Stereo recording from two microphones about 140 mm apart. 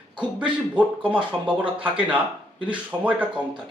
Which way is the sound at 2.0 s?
10° right (ahead or behind).